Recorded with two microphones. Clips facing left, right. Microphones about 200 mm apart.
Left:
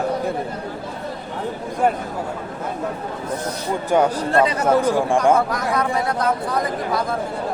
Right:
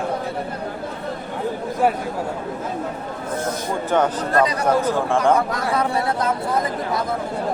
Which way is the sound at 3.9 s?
10° left (ahead or behind).